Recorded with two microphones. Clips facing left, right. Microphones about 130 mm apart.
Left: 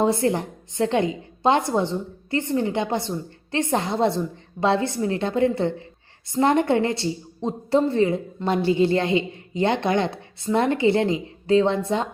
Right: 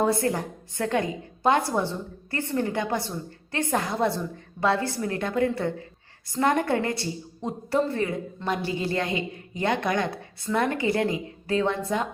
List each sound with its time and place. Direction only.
0.0 s a woman's voice: 25° left (ahead or behind)